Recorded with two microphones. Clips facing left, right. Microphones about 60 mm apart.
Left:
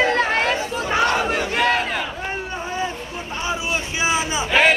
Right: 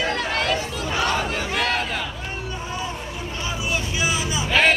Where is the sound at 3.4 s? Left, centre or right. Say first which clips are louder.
Left 2 dB; left.